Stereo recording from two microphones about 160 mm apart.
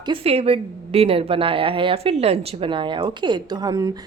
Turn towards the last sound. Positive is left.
turn(degrees=-25)  # may be behind; listen again after turning